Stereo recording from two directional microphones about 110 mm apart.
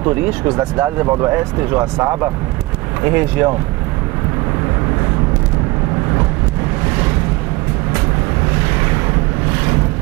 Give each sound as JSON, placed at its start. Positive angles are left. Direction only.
{"t": 0.0, "sound": "speech", "side_deg": -20}